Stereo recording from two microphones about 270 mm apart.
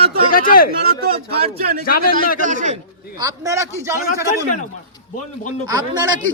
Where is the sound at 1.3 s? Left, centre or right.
Right.